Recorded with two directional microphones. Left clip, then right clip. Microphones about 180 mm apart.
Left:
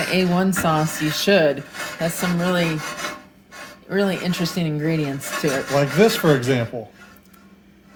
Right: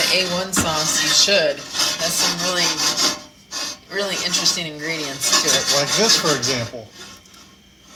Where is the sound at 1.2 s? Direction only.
65° left (ahead or behind).